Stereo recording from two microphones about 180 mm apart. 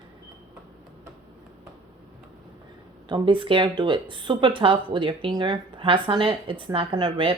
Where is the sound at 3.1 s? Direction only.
30° right (ahead or behind).